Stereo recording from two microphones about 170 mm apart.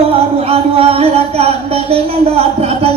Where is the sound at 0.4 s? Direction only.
35° right (ahead or behind).